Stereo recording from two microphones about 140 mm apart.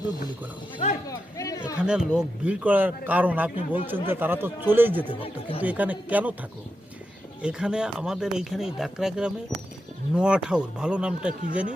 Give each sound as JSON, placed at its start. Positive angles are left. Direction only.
{"t": 1.0, "sound": "chatter", "side_deg": 25}
{"t": 1.9, "sound": "a man's voice", "side_deg": -5}
{"t": 5.2, "sound": "speech", "side_deg": 40}
{"t": 5.6, "sound": "a man's voice", "side_deg": -10}
{"t": 7.4, "sound": "a man's voice", "side_deg": -5}